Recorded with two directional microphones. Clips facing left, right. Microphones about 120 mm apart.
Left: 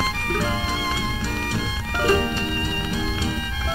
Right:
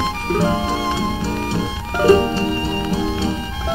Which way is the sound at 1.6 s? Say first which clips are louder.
Right 6 dB; 30° right (ahead or behind).